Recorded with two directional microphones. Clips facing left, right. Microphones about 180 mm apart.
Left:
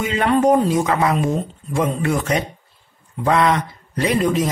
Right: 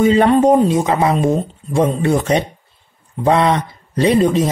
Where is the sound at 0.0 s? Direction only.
35° right (ahead or behind).